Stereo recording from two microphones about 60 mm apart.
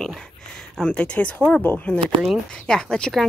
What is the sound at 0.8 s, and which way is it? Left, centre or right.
Speech, centre.